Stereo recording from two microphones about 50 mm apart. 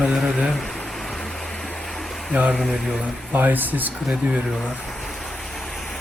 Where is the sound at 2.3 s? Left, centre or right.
Right.